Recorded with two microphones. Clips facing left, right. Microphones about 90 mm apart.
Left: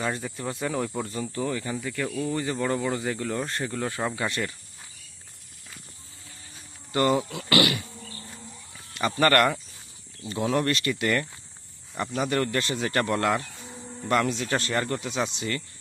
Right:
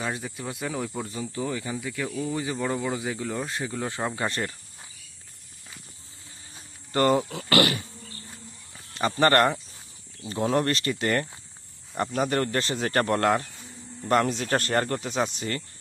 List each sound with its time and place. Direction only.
0.0 s speech: 5° right (ahead or behind)
3.8 s speech: 20° right (ahead or behind)
4.3 s speech: 35° right (ahead or behind)
6.9 s speech: 40° right (ahead or behind)
9.0 s speech: 35° right (ahead or behind)
10.2 s speech: 40° right (ahead or behind)